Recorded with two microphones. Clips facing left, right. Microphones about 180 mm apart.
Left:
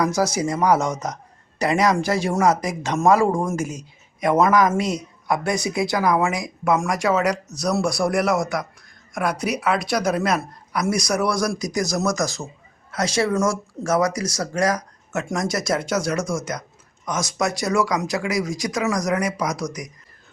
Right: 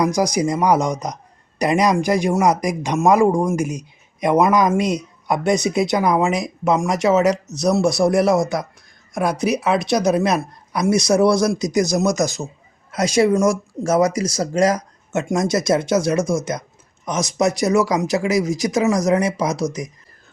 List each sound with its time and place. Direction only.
0.0 s speech: 15° right (ahead or behind)